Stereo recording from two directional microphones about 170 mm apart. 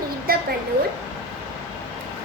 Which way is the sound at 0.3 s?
60° right (ahead or behind).